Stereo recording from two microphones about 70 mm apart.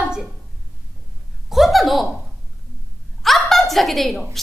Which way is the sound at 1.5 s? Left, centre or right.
Centre.